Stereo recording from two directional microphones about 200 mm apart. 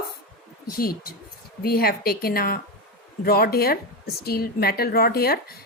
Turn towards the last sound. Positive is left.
turn(degrees=50)  # may be behind; listen again after turning